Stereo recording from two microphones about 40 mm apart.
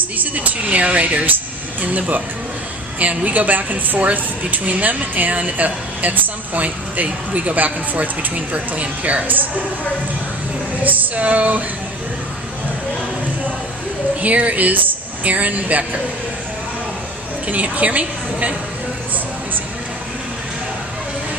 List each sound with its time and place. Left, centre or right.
0.2 s speech: right
8.5 s speech: right
10.8 s speech: right
14.2 s speech: right
17.4 s a woman's voice: right